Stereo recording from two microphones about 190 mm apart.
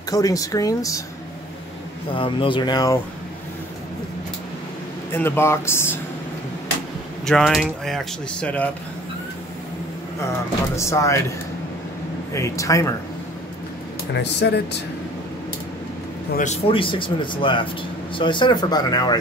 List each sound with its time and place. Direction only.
0.1 s speech: 20° left (ahead or behind)
2.1 s speech: 25° left (ahead or behind)
5.1 s speech: 10° left (ahead or behind)
7.2 s speech: centre (ahead or behind)
10.8 s speech: 15° left (ahead or behind)
14.1 s speech: 65° left (ahead or behind)
16.6 s speech: 25° left (ahead or behind)